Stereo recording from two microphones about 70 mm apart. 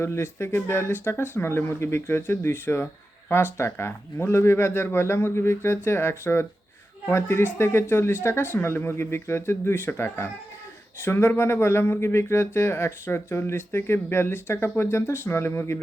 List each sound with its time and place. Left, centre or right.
0.0 s speech: left